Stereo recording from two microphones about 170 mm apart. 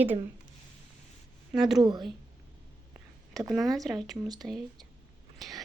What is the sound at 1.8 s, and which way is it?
Speech, 25° right (ahead or behind).